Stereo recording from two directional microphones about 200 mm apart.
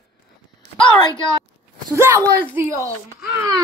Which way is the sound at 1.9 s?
15° right (ahead or behind).